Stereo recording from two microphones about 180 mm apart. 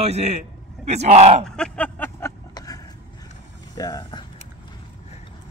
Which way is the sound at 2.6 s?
20° left (ahead or behind).